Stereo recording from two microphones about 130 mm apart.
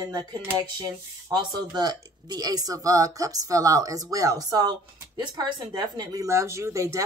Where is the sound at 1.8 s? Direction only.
30° right (ahead or behind).